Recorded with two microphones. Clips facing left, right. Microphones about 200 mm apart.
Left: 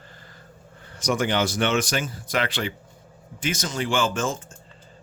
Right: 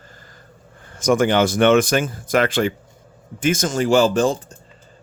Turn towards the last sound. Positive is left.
turn(degrees=-35)  # may be behind; listen again after turning